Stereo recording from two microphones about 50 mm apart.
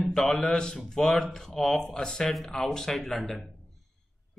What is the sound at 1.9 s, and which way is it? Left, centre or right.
Mantra, centre.